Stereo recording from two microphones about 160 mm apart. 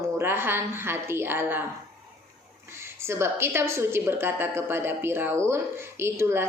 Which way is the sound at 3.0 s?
15° right (ahead or behind).